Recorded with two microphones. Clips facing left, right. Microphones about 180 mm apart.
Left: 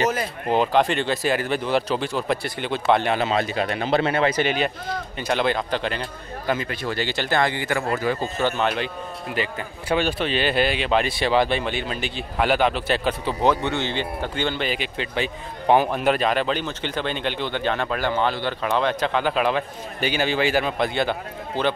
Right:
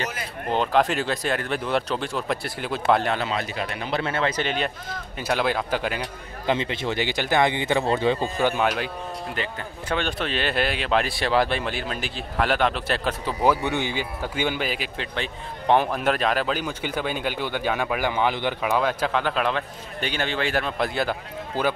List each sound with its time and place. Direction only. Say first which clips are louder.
0.5 s speech: left 2 dB; 5° left (ahead or behind)
3.2 s speech: left 5 dB; 25° left (ahead or behind)
4.1 s speech: left 4 dB; 10° left (ahead or behind)
5.2 s speech: left 1 dB; 5° right (ahead or behind)
6.4 s speech: right 1 dB; 25° right (ahead or behind)
8.2 s speech: even; 10° right (ahead or behind)
9.3 s speech: left 3 dB; 10° left (ahead or behind)